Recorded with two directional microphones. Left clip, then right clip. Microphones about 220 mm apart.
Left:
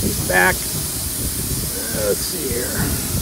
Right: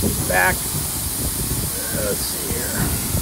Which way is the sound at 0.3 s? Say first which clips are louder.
Left 2 dB; 40° left (ahead or behind).